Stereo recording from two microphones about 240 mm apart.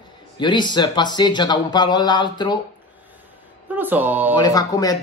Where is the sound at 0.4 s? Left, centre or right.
Centre.